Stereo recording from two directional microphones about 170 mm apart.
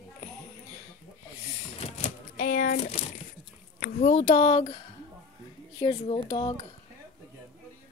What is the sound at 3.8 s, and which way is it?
Speech, 45° left (ahead or behind).